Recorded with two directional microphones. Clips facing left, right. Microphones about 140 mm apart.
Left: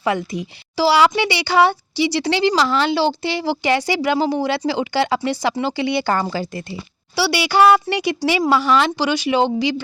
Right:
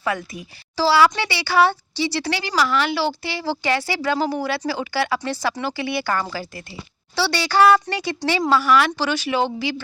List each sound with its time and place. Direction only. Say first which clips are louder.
0.3 s a woman's voice: left 4 dB; 15° left (ahead or behind)
7.2 s speech: left 2 dB; 10° left (ahead or behind)